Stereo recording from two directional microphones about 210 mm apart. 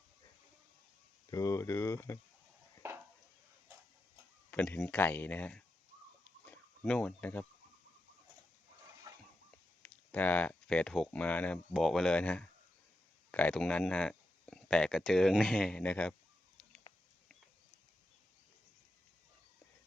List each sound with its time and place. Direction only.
1.3 s speech: 15° left (ahead or behind)
2.8 s a sound: 10° right (ahead or behind)
4.5 s speech: 5° left (ahead or behind)
6.4 s a sound: 5° left (ahead or behind)
9.1 s chicken: 20° right (ahead or behind)
9.8 s speech: 5° left (ahead or behind)